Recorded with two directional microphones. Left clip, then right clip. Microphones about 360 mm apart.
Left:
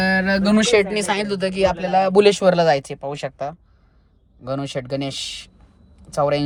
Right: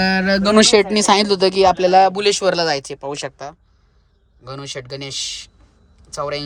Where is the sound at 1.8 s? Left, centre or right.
Right.